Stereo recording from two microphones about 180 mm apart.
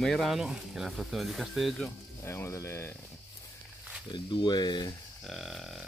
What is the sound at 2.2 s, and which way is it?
Speech, 15° left (ahead or behind).